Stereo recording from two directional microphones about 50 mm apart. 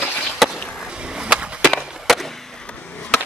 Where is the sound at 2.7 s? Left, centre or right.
Left.